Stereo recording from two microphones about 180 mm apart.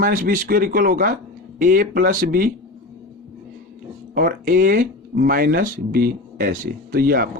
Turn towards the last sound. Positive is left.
turn(degrees=-55)  # may be behind; listen again after turning